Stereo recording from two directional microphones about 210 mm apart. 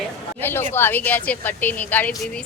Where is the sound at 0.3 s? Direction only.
10° left (ahead or behind).